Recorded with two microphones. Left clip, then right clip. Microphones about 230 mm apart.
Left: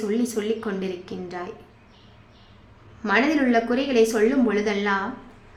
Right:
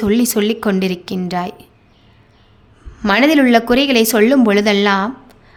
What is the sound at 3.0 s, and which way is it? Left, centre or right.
Speech, right.